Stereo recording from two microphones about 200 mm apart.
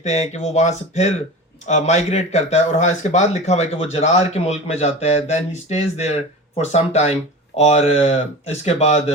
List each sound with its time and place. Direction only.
0.0 s speech: 35° left (ahead or behind)